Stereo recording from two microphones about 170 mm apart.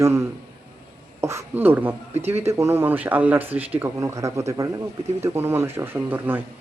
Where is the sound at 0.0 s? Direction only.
15° right (ahead or behind).